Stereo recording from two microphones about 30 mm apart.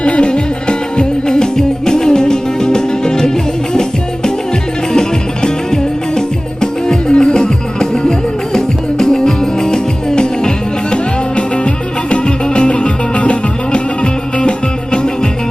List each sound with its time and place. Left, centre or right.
0.0 s music: left
4.9 s music: left
10.9 s music: left